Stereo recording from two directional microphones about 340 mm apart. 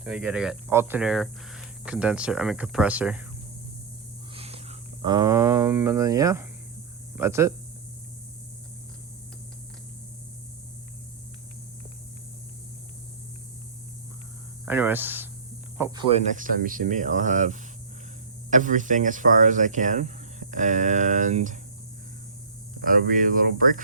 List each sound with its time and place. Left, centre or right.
0.0 s speech: centre
4.4 s speech: centre
14.6 s hum: centre
15.8 s speech: centre
22.8 s speech: right